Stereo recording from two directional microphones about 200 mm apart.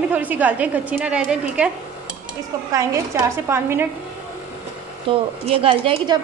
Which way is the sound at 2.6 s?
15° right (ahead or behind).